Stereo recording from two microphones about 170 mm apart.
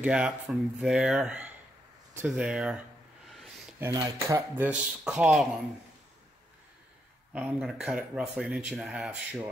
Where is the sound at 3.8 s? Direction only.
15° right (ahead or behind).